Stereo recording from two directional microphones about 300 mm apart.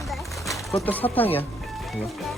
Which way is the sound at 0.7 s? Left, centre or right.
Centre.